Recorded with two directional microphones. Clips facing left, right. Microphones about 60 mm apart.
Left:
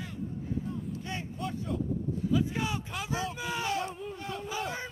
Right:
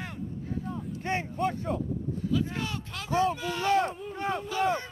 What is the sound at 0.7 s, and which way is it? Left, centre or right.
Speech, right.